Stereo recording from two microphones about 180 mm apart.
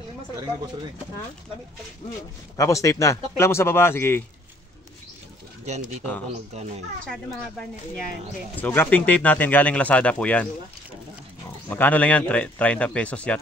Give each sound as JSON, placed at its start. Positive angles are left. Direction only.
{"t": 2.5, "sound": "speech", "side_deg": 20}
{"t": 5.7, "sound": "speech", "side_deg": -40}
{"t": 8.5, "sound": "speech", "side_deg": 10}
{"t": 11.7, "sound": "speech", "side_deg": 10}